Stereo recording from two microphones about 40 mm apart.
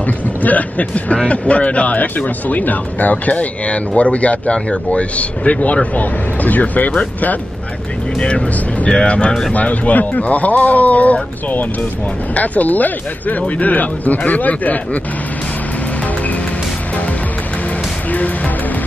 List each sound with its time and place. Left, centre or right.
0.0 s speech: left
8.2 s speech: left
9.5 s speech: left